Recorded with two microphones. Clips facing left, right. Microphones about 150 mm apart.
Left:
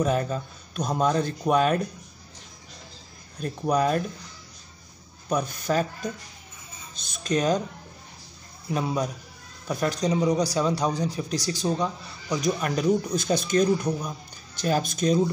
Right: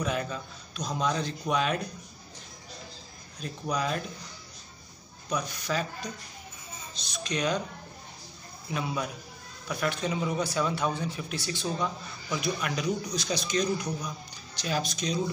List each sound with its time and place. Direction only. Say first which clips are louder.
0.0 s speech: left 6 dB; 40° left (ahead or behind)
3.3 s speech: left 7 dB; 50° left (ahead or behind)
5.3 s speech: left 6 dB; 50° left (ahead or behind)
8.7 s speech: left 5 dB; 40° left (ahead or behind)